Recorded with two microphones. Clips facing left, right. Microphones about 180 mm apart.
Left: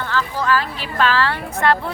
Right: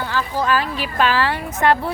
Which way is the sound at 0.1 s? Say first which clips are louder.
Left 1 dB; 15° right (ahead or behind).